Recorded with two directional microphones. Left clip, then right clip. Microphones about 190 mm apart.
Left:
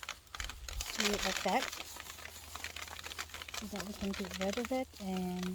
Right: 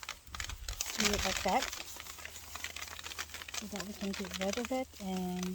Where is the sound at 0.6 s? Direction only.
5° right (ahead or behind).